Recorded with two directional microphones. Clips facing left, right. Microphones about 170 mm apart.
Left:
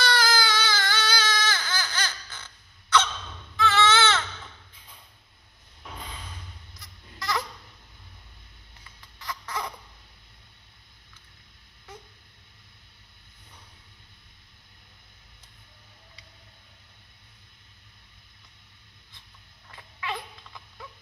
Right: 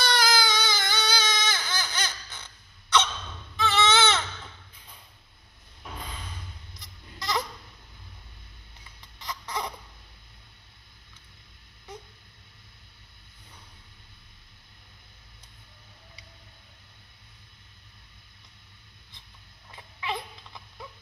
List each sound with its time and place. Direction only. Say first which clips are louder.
0.0 s baby cry: even; 15° right (ahead or behind)
7.2 s a sound: even; 20° right (ahead or behind)
9.2 s chicken: even; 20° right (ahead or behind)
19.7 s cat: right 1 dB; 15° right (ahead or behind)